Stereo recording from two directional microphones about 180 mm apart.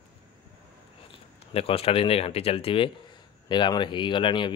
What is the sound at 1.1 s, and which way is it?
A man's voice, 30° left (ahead or behind).